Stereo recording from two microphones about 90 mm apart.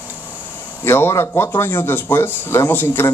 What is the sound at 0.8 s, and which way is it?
A man's voice, 30° left (ahead or behind).